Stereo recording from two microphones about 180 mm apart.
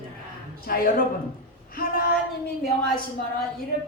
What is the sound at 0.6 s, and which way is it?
A man's voice, 55° left (ahead or behind).